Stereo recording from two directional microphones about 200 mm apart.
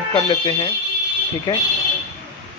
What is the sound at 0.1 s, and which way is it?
A man's voice, 25° left (ahead or behind).